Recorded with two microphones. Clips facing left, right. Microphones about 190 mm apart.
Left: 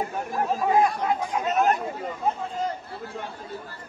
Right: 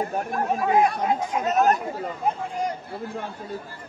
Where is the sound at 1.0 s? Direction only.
20° right (ahead or behind).